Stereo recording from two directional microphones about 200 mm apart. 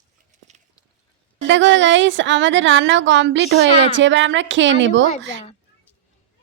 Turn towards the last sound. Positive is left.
turn(degrees=-65)  # may be behind; listen again after turning